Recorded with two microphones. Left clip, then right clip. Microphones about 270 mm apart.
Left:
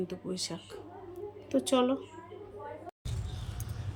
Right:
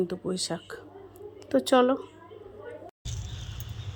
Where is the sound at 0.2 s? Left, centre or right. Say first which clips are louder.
Right 6 dB; centre.